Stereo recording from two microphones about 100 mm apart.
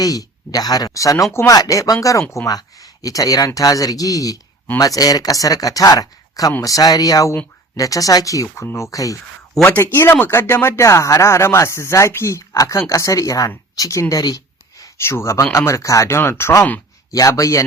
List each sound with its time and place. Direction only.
0.0 s speech: 35° left (ahead or behind)
9.6 s speech: 20° left (ahead or behind)
13.7 s a sound: 35° left (ahead or behind)
14.9 s speech: 25° left (ahead or behind)